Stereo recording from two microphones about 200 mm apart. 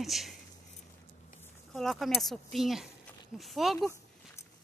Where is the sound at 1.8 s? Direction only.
Centre (ahead or behind).